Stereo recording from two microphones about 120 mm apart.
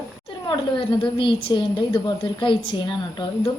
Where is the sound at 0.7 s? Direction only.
45° left (ahead or behind).